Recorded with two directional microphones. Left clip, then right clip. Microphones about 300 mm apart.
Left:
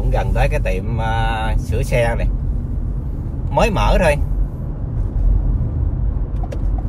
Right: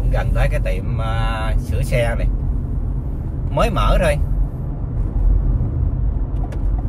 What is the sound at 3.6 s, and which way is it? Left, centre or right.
Speech, centre.